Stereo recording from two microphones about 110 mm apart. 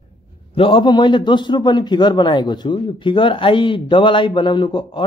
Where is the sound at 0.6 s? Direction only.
50° left (ahead or behind).